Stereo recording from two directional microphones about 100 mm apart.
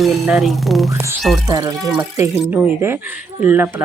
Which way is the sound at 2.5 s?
20° right (ahead or behind).